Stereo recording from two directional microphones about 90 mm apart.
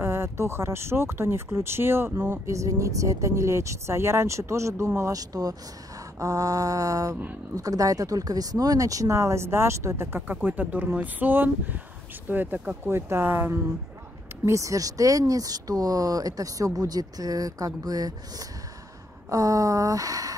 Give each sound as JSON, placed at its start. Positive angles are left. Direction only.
{"t": 0.0, "sound": "speech", "side_deg": -30}
{"t": 14.4, "sound": "speech", "side_deg": -35}
{"t": 19.2, "sound": "speech", "side_deg": -40}